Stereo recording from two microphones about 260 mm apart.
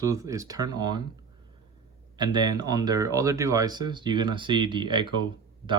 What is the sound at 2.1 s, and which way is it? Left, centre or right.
Speech, centre.